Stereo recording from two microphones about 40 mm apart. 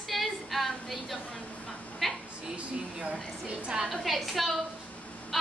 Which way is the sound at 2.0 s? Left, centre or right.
Centre.